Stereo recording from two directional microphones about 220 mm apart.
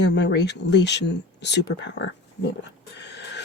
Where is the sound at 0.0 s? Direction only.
50° left (ahead or behind).